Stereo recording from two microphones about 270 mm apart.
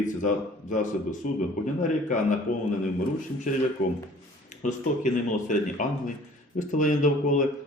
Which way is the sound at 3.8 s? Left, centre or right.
Left.